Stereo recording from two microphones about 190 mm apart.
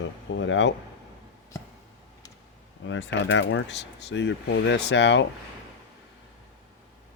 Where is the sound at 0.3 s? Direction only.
75° left (ahead or behind).